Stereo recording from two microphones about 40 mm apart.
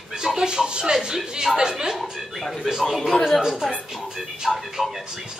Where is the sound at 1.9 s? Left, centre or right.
Centre.